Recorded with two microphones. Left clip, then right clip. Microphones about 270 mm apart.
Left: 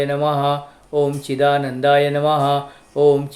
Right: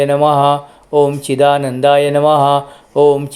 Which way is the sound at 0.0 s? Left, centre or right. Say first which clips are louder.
Right 8 dB; right.